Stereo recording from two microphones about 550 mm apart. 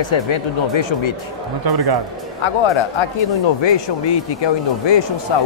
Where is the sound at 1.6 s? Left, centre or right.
Right.